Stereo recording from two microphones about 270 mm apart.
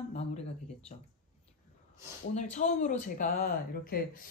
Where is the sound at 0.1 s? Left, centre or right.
Left.